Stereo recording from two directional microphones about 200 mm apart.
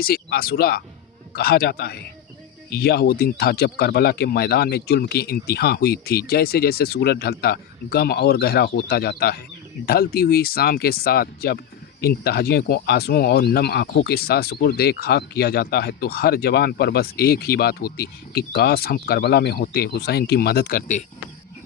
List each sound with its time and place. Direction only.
0.0 s speech: 50° left (ahead or behind)